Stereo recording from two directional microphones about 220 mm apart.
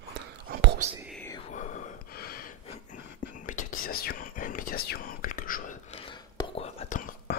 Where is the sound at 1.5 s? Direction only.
40° left (ahead or behind).